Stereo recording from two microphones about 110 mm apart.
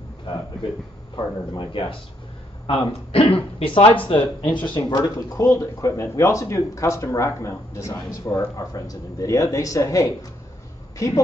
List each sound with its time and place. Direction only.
1.1 s a woman's voice: 40° left (ahead or behind)